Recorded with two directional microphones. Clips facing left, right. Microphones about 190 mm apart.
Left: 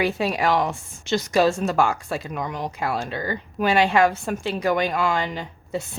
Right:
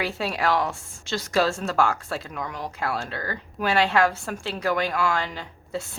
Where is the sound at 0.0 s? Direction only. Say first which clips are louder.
Left 4 dB; 15° left (ahead or behind).